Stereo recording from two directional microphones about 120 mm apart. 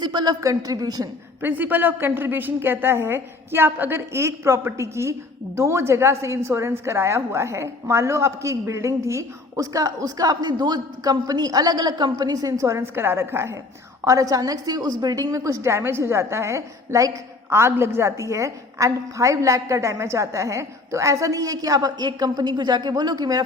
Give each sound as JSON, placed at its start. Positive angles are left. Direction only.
{"t": 0.0, "sound": "speech", "side_deg": -35}
{"t": 1.4, "sound": "a woman's voice", "side_deg": -15}